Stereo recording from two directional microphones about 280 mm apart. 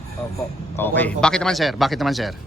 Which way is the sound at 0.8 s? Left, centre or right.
Centre.